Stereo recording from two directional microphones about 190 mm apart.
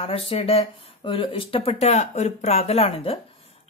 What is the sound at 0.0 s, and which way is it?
Speech, 30° left (ahead or behind).